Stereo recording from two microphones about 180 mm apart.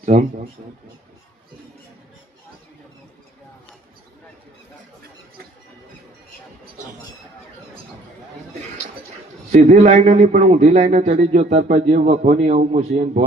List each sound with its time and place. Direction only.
0.0 s speech: 40° right (ahead or behind)
9.5 s a man's voice: 40° right (ahead or behind)